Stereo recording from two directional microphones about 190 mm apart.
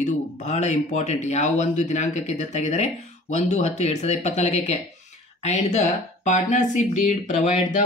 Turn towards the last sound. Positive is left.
turn(degrees=40)  # may be behind; listen again after turning